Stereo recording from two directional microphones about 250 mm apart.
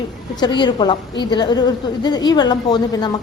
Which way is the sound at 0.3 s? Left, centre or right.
Centre.